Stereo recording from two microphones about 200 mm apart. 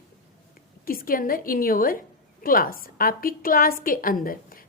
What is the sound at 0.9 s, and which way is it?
A woman's voice, 45° left (ahead or behind).